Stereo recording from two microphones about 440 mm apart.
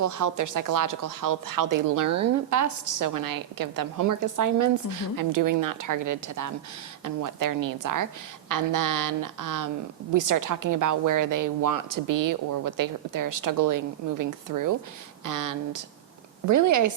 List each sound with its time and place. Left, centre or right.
0.0 s a woman's voice: right